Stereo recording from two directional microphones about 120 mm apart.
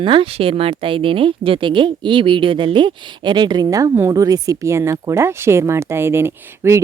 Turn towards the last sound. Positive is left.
turn(degrees=-20)  # may be behind; listen again after turning